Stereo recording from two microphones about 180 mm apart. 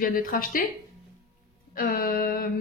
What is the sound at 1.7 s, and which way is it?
Speech, 55° left (ahead or behind).